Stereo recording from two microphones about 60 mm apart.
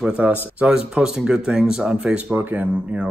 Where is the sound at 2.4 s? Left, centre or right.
Right.